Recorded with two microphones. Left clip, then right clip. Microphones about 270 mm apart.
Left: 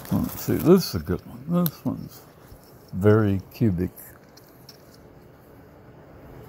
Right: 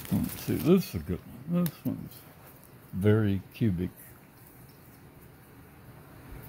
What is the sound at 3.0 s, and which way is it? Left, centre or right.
Speech, centre.